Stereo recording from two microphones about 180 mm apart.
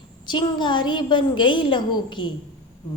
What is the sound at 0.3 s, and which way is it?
A woman's voice, 25° left (ahead or behind).